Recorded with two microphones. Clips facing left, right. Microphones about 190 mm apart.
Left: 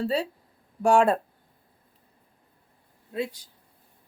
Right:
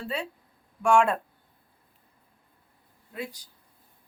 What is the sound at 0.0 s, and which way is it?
A woman's voice, 35° left (ahead or behind).